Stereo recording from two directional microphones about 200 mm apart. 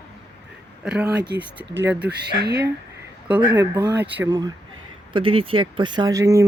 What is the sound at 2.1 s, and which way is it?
Speech, 55° right (ahead or behind).